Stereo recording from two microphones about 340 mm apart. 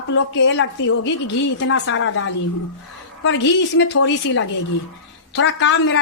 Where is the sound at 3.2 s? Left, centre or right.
Left.